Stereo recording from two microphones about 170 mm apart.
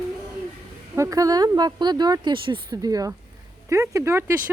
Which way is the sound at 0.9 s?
20° right (ahead or behind).